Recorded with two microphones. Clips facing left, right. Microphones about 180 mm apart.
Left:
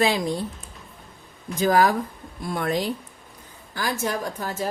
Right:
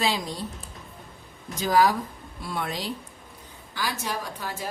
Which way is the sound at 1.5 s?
50° left (ahead or behind).